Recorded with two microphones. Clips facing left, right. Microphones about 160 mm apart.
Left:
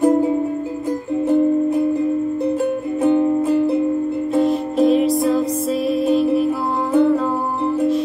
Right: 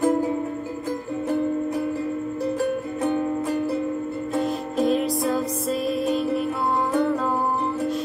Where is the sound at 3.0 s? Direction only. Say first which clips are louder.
Left 9 dB; 20° left (ahead or behind).